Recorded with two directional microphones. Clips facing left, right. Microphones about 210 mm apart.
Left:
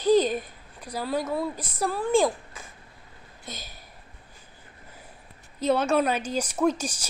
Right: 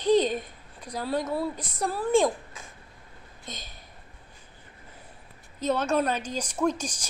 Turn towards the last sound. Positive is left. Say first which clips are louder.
# left 2 dB
turn(degrees=5)  # may be behind; listen again after turning